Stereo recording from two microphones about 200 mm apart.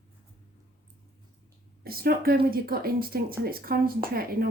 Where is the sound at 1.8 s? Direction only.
50° right (ahead or behind).